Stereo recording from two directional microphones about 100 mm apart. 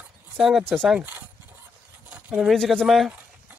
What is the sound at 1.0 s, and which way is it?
Speech, 20° right (ahead or behind).